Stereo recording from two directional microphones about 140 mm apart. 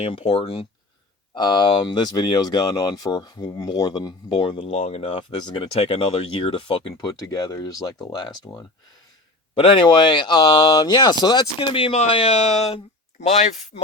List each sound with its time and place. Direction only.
0.0 s speech: 40° left (ahead or behind)